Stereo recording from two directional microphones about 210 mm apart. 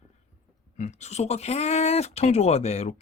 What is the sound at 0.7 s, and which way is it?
Speech, 35° left (ahead or behind).